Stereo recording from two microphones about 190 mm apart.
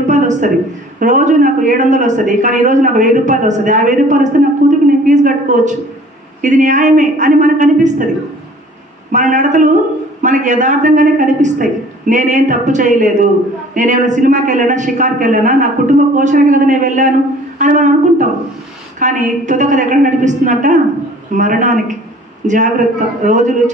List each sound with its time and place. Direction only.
0.0 s a sound: 40° right (ahead or behind)
0.9 s a woman's voice: 40° right (ahead or behind)
9.1 s a woman's voice: 40° right (ahead or behind)